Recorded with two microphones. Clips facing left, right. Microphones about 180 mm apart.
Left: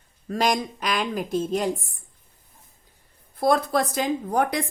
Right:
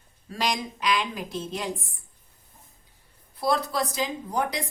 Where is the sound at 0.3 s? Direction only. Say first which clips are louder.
Left 5 dB; 50° left (ahead or behind).